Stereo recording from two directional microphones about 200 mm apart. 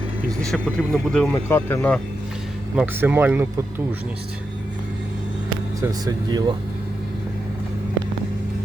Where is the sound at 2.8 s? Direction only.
10° right (ahead or behind).